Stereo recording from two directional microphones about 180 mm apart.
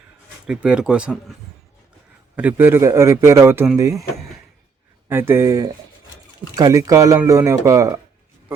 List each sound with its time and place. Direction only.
0.4 s a man's voice: 5° right (ahead or behind)
5.0 s a man's voice: 15° right (ahead or behind)